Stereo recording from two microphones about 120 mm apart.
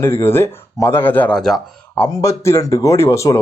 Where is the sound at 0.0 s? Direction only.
20° left (ahead or behind).